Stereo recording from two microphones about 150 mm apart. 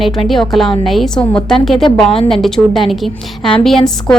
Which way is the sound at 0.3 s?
Centre (ahead or behind).